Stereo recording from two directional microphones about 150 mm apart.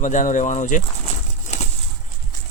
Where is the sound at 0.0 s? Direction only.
55° left (ahead or behind).